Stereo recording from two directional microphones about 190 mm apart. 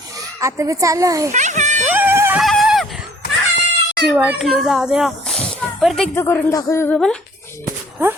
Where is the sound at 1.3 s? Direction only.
40° right (ahead or behind).